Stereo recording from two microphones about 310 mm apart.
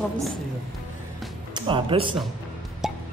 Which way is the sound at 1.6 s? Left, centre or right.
Centre.